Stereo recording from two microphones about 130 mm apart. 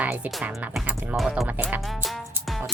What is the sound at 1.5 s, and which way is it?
Music, 15° right (ahead or behind).